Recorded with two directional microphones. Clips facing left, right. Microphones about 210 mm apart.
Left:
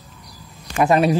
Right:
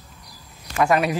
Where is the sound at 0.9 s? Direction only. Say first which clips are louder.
Left 5 dB; 30° left (ahead or behind).